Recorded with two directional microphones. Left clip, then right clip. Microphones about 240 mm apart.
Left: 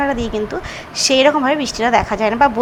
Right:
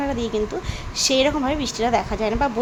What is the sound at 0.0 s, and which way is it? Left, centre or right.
A woman's voice, centre.